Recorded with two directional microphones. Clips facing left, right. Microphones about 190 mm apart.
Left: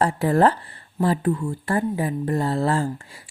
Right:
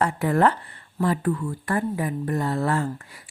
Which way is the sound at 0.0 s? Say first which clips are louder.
Left 2 dB; 30° left (ahead or behind).